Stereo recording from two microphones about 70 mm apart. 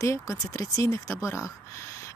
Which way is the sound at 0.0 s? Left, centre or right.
Left.